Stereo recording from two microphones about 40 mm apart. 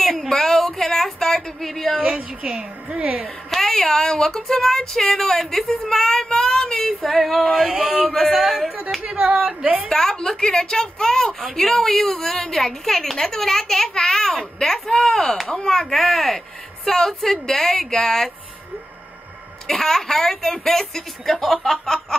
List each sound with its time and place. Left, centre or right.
0.3 s a sound: centre
2.0 s a woman's voice: right
2.9 s a woman's voice: right
3.4 s a woman's voice: centre
7.5 s speech: centre
8.1 s speech: centre
9.0 s a woman's voice: right
9.8 s a woman's voice: centre
15.9 s a woman's voice: centre
19.7 s a woman's voice: centre